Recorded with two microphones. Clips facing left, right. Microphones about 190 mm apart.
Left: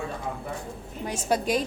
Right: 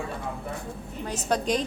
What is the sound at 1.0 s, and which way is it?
Speech, 10° left (ahead or behind).